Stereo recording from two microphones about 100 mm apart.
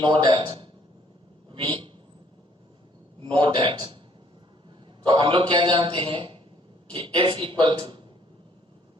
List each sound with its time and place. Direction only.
0.0 s a man's voice: 60° right (ahead or behind)
1.5 s a sound: 60° right (ahead or behind)
3.2 s a man's voice: 55° right (ahead or behind)
5.0 s a man's voice: 55° right (ahead or behind)